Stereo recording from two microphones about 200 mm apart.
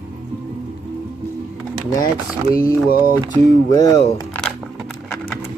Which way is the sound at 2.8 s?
45° left (ahead or behind).